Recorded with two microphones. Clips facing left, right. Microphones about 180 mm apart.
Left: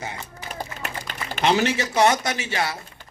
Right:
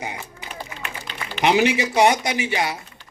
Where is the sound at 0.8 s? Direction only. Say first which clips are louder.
Left 1 dB; 45° left (ahead or behind).